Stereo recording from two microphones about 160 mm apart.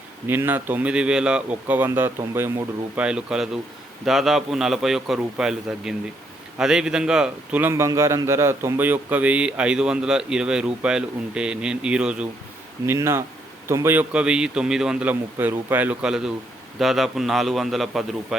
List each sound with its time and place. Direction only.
0.3 s a man's voice: 15° right (ahead or behind)